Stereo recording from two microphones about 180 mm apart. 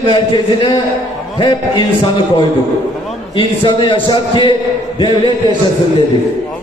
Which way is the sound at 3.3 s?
30° left (ahead or behind).